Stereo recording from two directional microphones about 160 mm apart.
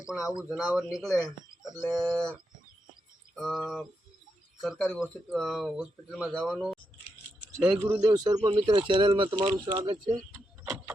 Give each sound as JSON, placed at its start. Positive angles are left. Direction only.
{"t": 0.2, "sound": "speech", "side_deg": 20}
{"t": 0.4, "sound": "speech", "side_deg": 0}
{"t": 3.3, "sound": "speech", "side_deg": 0}
{"t": 4.6, "sound": "speech", "side_deg": 0}
{"t": 7.7, "sound": "speech", "side_deg": -10}
{"t": 10.3, "sound": "vehicle", "side_deg": -5}